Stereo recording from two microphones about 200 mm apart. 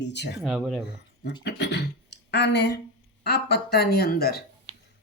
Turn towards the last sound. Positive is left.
turn(degrees=-25)  # may be behind; listen again after turning